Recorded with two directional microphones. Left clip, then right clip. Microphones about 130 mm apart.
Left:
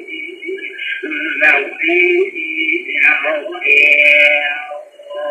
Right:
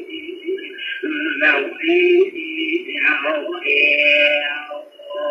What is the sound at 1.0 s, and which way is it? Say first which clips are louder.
Male singing: left 4 dB; 40° right (ahead or behind).